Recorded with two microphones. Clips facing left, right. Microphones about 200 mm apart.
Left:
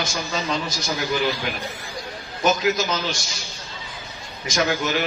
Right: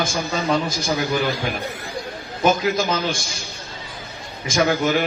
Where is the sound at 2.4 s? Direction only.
50° right (ahead or behind).